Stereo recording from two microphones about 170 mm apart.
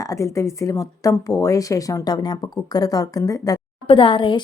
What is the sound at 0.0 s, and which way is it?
A woman's voice, 20° left (ahead or behind).